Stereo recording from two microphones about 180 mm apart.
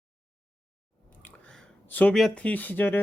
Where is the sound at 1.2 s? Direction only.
5° left (ahead or behind).